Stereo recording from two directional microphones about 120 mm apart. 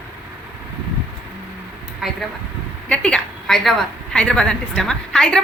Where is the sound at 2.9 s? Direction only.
10° left (ahead or behind).